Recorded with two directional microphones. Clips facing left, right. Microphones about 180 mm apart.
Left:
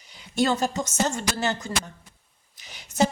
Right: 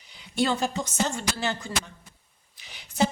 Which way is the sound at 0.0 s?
45° left (ahead or behind).